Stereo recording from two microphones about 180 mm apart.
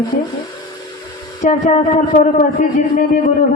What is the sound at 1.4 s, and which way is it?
A man's voice, 40° left (ahead or behind).